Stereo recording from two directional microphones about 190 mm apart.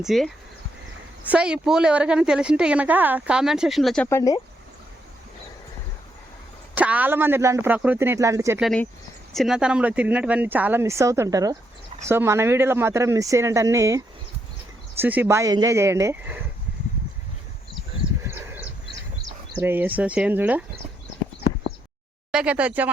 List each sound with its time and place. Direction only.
0.0 s a woman's voice: centre (ahead or behind)
1.3 s a woman's voice: 5° right (ahead or behind)
4.1 s speech: 20° left (ahead or behind)
6.7 s speech: 10° right (ahead or behind)
8.6 s a woman's voice: 5° left (ahead or behind); by 16.4 s 10° right (ahead or behind)
18.3 s a sound: 10° right (ahead or behind)
19.5 s speech: 10° right (ahead or behind)
22.3 s speech: 5° right (ahead or behind)